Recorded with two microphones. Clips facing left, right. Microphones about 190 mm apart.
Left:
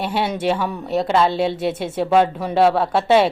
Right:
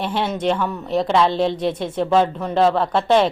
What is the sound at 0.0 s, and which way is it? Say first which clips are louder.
A woman's voice: even; 5° left (ahead or behind).